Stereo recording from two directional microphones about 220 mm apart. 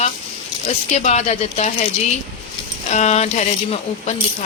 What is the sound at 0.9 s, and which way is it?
Speech, 30° left (ahead or behind).